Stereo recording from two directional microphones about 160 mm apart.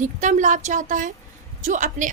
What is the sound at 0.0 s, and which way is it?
A woman's voice, 50° right (ahead or behind).